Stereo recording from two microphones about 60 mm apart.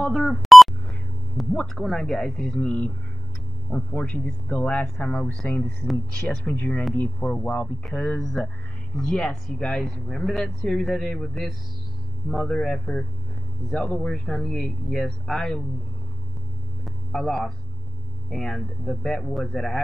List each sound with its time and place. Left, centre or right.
0.0 s a sound: centre
1.3 s speech: centre; by 4.8 s left
4.8 s speech: centre
6.5 s speech: left
8.2 s speech: centre
16.8 s hum: centre
18.3 s speech: centre